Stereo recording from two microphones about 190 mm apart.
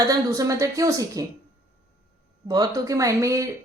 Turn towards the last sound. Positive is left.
turn(degrees=-15)  # may be behind; listen again after turning